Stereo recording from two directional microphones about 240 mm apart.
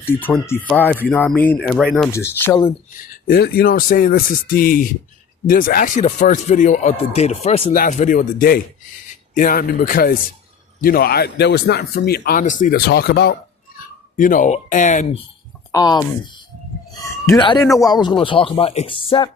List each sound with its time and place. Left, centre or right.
0.0 s speech: centre
3.2 s a man's voice: left
15.7 s speech: centre